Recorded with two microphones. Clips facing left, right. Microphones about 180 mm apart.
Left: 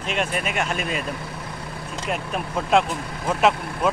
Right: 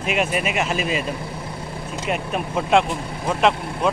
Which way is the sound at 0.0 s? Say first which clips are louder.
Right 3 dB; 10° right (ahead or behind).